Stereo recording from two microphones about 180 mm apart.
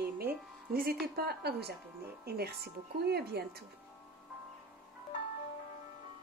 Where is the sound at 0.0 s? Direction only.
60° right (ahead or behind).